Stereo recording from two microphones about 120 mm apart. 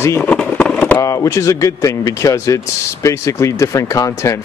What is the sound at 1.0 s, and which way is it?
Speech, 25° left (ahead or behind).